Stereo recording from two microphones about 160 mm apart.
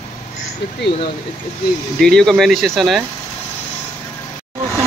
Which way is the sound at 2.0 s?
5° left (ahead or behind).